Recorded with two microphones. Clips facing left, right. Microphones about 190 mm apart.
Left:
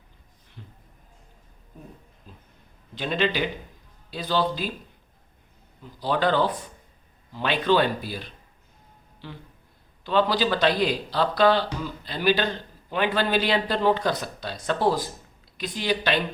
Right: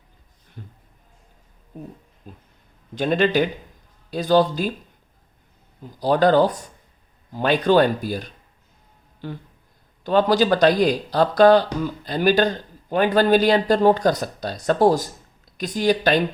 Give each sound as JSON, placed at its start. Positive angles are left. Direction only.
{"t": 0.6, "sound": "a sound", "side_deg": -45}
{"t": 2.3, "sound": "speech", "side_deg": -50}
{"t": 5.8, "sound": "speech", "side_deg": -40}